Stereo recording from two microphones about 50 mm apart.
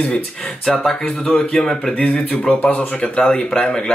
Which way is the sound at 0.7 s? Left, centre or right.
Centre.